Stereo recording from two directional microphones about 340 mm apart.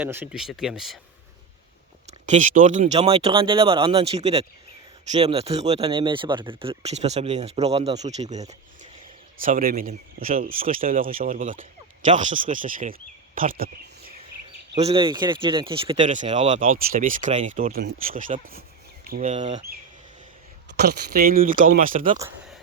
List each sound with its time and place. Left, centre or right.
0.0 s speech: centre
2.0 s speech: right
14.8 s speech: centre